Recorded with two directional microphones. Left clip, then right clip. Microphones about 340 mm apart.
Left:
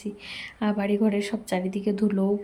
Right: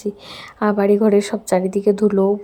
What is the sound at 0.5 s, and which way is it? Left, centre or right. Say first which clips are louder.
A woman's voice: right 11 dB; right.